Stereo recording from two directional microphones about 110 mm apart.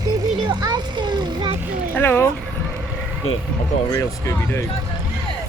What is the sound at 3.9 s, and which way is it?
Speech, 25° left (ahead or behind).